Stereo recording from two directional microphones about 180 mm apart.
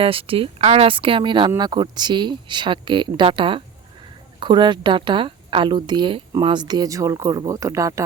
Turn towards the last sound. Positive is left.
turn(degrees=-15)  # may be behind; listen again after turning